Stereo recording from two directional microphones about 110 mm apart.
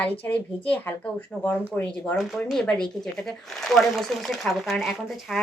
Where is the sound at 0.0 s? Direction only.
15° left (ahead or behind).